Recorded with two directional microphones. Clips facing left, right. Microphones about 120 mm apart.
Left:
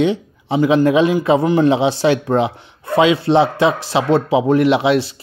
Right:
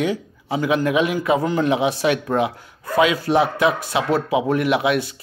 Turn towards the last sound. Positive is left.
turn(degrees=30)  # may be behind; listen again after turning